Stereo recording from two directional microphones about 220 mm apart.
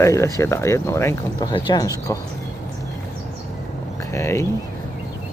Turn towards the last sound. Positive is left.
turn(degrees=15)  # may be behind; listen again after turning